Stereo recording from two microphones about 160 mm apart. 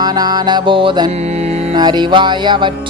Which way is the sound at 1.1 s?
40° right (ahead or behind).